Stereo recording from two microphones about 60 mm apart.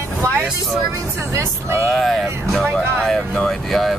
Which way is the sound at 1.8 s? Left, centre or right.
Centre.